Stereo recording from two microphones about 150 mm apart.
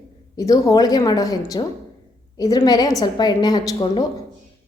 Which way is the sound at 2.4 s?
25° left (ahead or behind).